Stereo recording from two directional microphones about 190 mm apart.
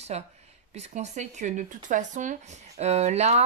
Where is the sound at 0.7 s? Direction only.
35° right (ahead or behind).